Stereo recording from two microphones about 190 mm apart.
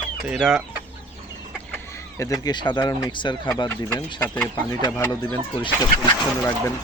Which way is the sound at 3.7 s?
10° left (ahead or behind).